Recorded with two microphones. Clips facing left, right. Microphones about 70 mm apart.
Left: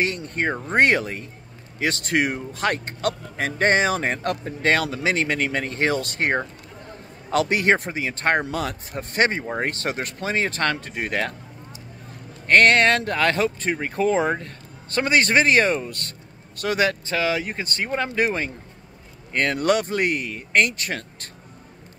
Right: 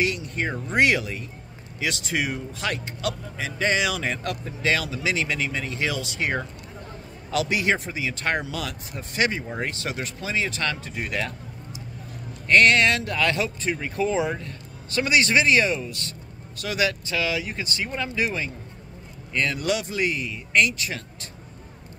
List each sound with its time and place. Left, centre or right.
0.0 s speech: left